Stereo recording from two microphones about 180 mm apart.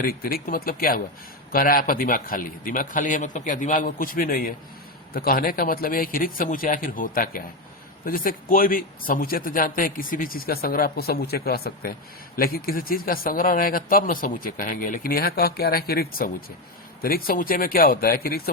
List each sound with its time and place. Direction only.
0.0 s speech: 55° left (ahead or behind)